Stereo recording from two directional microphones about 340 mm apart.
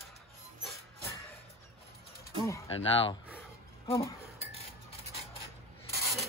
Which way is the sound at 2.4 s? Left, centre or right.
Centre.